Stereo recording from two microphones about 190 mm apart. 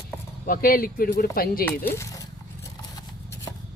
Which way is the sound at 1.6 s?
10° left (ahead or behind).